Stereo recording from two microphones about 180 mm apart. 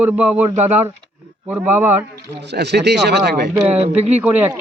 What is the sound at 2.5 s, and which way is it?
Speech, 70° right (ahead or behind).